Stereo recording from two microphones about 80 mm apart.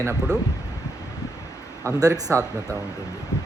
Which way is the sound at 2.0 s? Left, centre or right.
Right.